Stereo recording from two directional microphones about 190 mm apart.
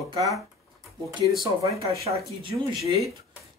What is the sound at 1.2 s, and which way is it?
Speech, 15° right (ahead or behind).